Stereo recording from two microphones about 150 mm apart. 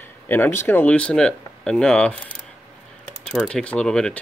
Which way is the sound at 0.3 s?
15° left (ahead or behind).